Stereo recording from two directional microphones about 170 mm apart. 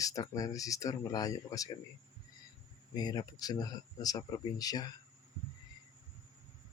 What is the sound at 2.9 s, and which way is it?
Speech, 25° left (ahead or behind).